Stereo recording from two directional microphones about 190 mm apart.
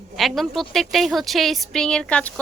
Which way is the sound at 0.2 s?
Centre (ahead or behind).